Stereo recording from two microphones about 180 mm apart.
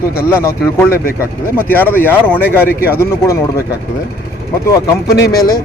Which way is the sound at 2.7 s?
55° left (ahead or behind).